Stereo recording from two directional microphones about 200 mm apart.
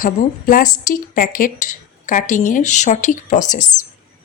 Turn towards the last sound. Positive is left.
turn(degrees=40)  # may be behind; listen again after turning